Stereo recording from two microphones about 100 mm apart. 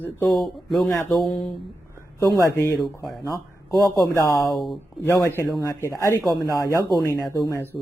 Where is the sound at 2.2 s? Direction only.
25° left (ahead or behind).